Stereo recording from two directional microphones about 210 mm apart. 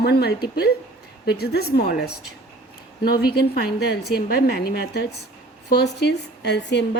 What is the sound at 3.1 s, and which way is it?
Speech, 20° left (ahead or behind).